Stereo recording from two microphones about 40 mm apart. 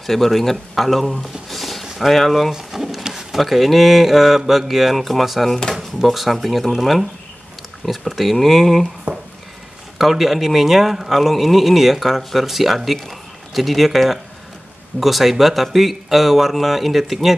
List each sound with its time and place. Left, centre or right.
0.0 s speech: centre
2.5 s pigeon: centre
3.0 s speech: centre
5.5 s speech: centre
5.8 s speech: centre
9.1 s a sound: right
9.9 s speech: centre